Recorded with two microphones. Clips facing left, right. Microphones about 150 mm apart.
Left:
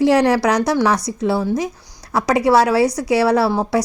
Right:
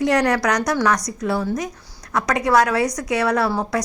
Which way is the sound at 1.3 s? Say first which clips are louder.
Left 2 dB; 10° left (ahead or behind).